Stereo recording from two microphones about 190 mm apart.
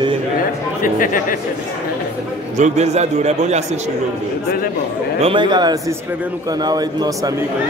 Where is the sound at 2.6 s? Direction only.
35° right (ahead or behind).